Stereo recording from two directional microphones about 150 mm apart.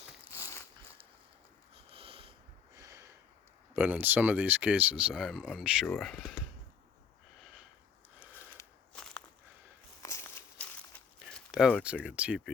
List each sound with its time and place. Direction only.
0.3 s biting: 20° left (ahead or behind)
1.7 s sniff: 40° right (ahead or behind)
2.7 s a sound: 20° right (ahead or behind)
3.8 s speech: 10° right (ahead or behind)
8.9 s walk: 5° left (ahead or behind)
10.0 s walk: 20° left (ahead or behind)
11.2 s a sound: centre (ahead or behind)
11.8 s speech: 10° right (ahead or behind)